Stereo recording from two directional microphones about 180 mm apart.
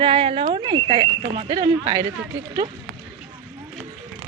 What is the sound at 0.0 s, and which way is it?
Speech, 30° right (ahead or behind).